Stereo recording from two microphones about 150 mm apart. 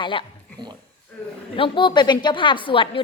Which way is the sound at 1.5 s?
35° left (ahead or behind).